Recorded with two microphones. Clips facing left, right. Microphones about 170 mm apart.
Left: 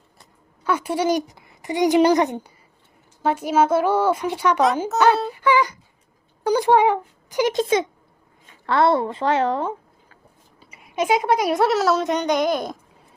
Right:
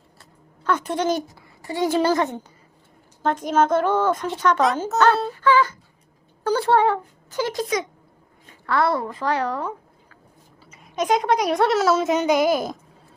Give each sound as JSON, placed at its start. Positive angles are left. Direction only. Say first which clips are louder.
{"t": 0.2, "sound": "speech", "louder": "right 2 dB", "side_deg": 10}
{"t": 5.3, "sound": "a sound", "louder": "even", "side_deg": 15}
{"t": 6.4, "sound": "a child's voice", "louder": "left 2 dB", "side_deg": 15}
{"t": 10.6, "sound": "speech", "louder": "left 2 dB", "side_deg": 10}